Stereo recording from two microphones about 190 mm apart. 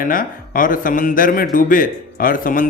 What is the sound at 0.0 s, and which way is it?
Speech, 50° left (ahead or behind).